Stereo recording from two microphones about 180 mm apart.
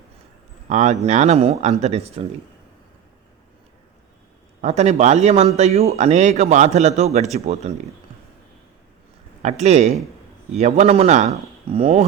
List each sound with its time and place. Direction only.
0.7 s speech: 40° right (ahead or behind)
4.6 s speech: 35° right (ahead or behind)
9.4 s speech: 40° right (ahead or behind)